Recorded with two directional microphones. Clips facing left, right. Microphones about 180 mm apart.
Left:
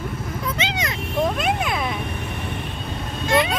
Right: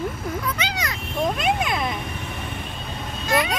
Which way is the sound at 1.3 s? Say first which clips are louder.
Even; centre (ahead or behind).